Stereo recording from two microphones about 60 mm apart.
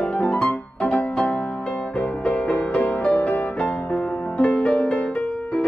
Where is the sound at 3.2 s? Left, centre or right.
Left.